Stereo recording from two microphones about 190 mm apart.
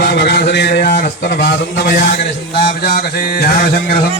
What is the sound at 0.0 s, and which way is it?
A man's voice, 60° left (ahead or behind).